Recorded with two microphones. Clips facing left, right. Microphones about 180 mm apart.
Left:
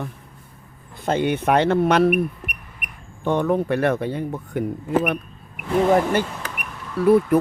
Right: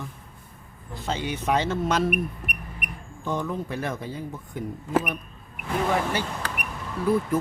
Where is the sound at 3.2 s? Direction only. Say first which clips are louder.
Left 9 dB; 65° left (ahead or behind).